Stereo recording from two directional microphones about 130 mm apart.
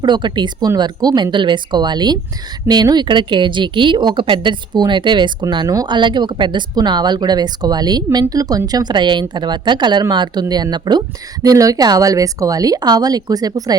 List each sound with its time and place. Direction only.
0.0 s speech: 35° right (ahead or behind)